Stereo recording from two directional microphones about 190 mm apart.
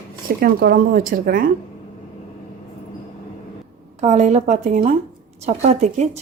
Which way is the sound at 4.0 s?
35° right (ahead or behind).